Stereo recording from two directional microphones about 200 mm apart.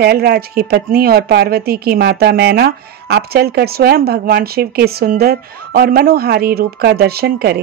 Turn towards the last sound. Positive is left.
turn(degrees=-50)  # may be behind; listen again after turning